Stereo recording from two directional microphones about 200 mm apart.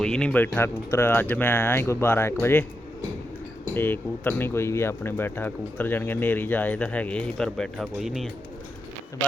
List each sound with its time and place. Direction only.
0.0 s speech: 5° left (ahead or behind)
3.8 s speech: 10° left (ahead or behind)